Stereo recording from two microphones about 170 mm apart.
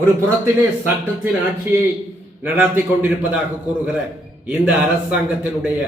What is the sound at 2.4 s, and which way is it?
A man's voice, 10° right (ahead or behind).